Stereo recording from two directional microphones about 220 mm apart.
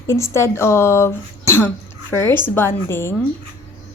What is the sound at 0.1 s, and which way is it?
Speech, 15° left (ahead or behind).